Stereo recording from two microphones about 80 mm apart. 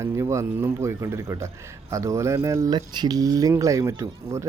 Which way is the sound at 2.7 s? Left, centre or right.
Right.